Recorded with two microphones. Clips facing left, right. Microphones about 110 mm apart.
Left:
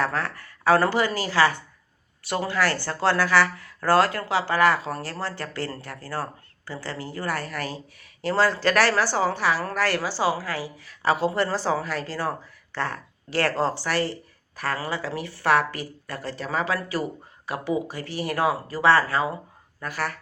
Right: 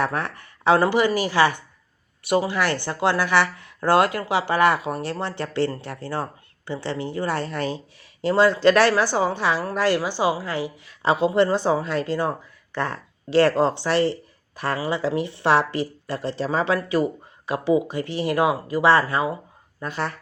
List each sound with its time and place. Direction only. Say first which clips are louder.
0.0 s speech: right 2 dB; 20° right (ahead or behind)